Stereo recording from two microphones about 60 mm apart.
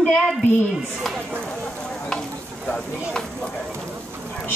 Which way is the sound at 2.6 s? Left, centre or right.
Centre.